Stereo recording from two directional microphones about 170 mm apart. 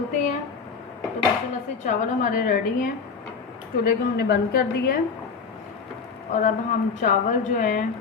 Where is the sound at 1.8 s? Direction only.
45° left (ahead or behind).